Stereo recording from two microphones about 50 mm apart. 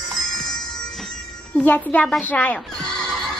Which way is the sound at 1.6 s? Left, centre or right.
Left.